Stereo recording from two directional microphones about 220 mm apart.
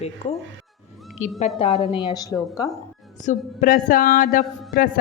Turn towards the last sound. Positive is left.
turn(degrees=40)  # may be behind; listen again after turning